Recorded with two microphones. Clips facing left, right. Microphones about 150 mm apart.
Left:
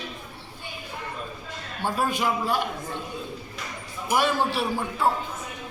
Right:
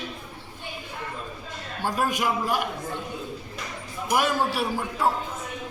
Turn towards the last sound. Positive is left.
turn(degrees=-10)  # may be behind; listen again after turning